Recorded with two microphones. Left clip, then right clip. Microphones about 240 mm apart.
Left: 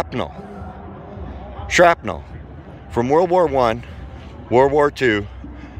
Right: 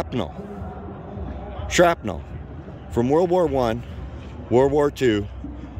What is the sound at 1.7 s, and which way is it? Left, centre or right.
Speech, centre.